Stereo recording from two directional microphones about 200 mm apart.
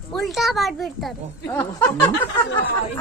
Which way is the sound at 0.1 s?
Centre (ahead or behind).